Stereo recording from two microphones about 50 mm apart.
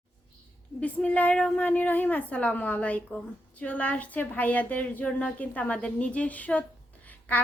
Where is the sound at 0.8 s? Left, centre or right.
Left.